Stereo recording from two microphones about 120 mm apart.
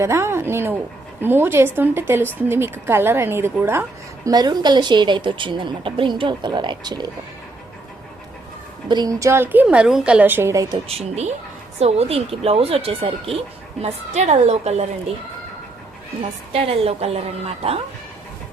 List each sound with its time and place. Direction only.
0.0 s a woman's voice: 20° right (ahead or behind)
4.3 s speech: 35° right (ahead or behind)
8.9 s a woman's voice: 30° right (ahead or behind); by 10.5 s 15° right (ahead or behind)
10.5 s a woman's voice: 30° right (ahead or behind)
10.8 s speech: 60° right (ahead or behind)
13.8 s speech: 70° right (ahead or behind)
16.5 s speech: 55° right (ahead or behind)